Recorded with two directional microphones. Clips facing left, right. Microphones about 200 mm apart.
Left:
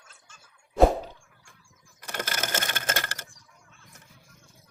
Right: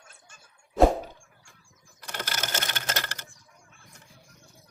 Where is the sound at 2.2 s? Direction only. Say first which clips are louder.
Left 1 dB; 50° left (ahead or behind).